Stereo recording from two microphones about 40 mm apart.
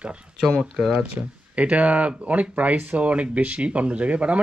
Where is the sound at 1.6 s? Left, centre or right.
Right.